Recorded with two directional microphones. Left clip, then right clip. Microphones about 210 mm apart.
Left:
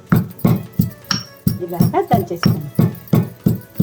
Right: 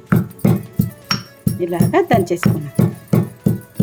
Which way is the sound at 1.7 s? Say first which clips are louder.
Right 2 dB; 25° right (ahead or behind).